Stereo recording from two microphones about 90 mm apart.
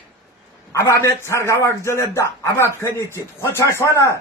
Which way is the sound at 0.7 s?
30° left (ahead or behind).